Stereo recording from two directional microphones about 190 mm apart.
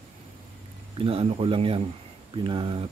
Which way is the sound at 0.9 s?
30° right (ahead or behind).